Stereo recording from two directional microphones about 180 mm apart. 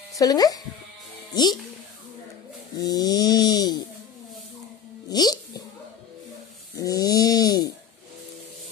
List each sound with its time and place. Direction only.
0.1 s speech: 20° left (ahead or behind)
2.7 s snoring: 20° left (ahead or behind)
5.1 s music: 20° left (ahead or behind)
6.7 s snoring: 20° left (ahead or behind)